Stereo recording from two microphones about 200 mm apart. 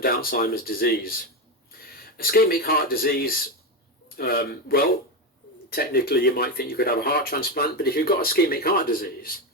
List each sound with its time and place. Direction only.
0.0 s speech: 50° left (ahead or behind)